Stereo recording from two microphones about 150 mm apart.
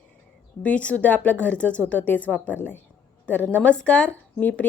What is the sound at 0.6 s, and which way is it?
Speech, 10° left (ahead or behind).